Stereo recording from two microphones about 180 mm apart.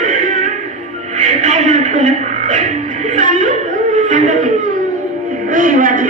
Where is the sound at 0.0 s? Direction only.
45° right (ahead or behind).